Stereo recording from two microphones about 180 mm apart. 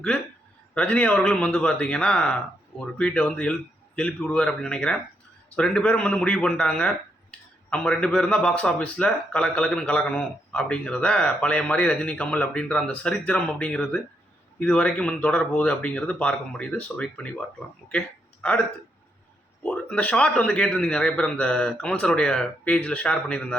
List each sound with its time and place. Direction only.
0.7 s speech: 5° left (ahead or behind)
18.4 s speech: 5° left (ahead or behind)
19.6 s speech: 5° left (ahead or behind)